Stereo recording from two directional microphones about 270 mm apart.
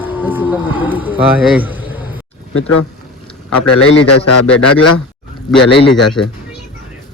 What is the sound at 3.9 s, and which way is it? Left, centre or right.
Speech, left.